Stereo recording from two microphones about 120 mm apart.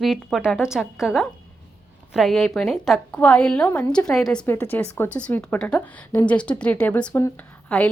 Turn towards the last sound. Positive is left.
turn(degrees=5)  # may be behind; listen again after turning